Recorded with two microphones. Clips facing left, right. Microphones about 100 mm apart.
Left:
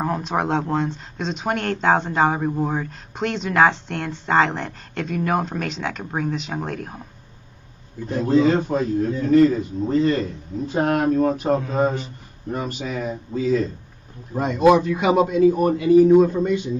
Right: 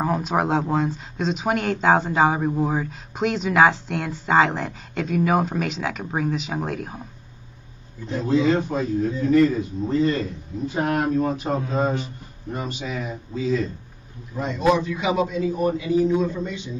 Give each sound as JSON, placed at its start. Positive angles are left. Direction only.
{"t": 0.0, "sound": "speech", "side_deg": 0}
{"t": 8.1, "sound": "a man's voice", "side_deg": 50}
{"t": 12.5, "sound": "a man's voice", "side_deg": 45}